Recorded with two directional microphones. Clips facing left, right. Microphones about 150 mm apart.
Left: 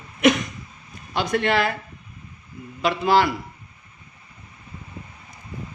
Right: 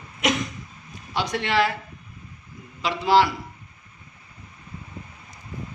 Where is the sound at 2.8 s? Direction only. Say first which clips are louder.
Even; 50° left (ahead or behind).